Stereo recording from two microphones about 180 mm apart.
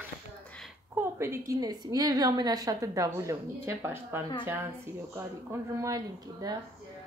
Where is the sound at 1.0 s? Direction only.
15° right (ahead or behind).